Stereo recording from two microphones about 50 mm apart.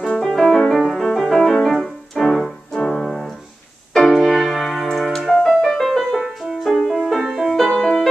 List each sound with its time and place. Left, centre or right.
0.0 s music: centre
1.7 s keyboard: centre
3.9 s music: centre
7.6 s music: centre